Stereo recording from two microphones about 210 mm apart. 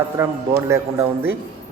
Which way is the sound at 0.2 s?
10° right (ahead or behind).